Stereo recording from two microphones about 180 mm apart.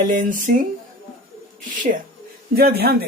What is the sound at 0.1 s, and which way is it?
Speech, 50° right (ahead or behind).